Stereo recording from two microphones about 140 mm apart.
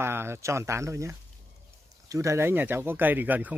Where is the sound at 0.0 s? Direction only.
15° right (ahead or behind).